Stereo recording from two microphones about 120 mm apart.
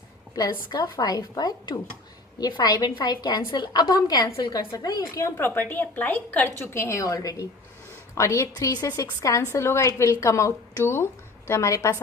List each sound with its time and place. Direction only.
0.7 s a woman's voice: 35° left (ahead or behind)